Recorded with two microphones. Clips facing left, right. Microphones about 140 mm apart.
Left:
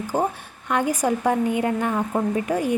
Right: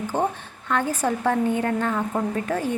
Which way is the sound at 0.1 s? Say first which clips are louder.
Left 2 dB; 10° left (ahead or behind).